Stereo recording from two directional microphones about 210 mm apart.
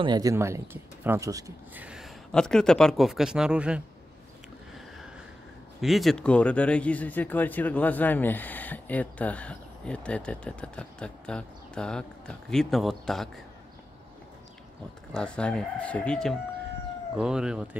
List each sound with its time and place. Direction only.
0.0 s speech: 20° right (ahead or behind)
5.8 s speech: centre (ahead or behind)
15.1 s speech: 5° left (ahead or behind)